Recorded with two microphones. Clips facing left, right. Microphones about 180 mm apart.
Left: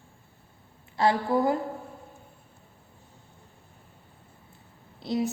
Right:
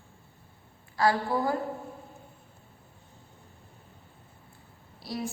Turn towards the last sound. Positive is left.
turn(degrees=20)  # may be behind; listen again after turning